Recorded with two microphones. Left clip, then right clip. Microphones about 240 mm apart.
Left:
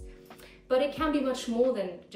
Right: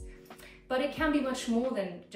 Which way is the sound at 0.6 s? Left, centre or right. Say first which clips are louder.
Left 3 dB; centre.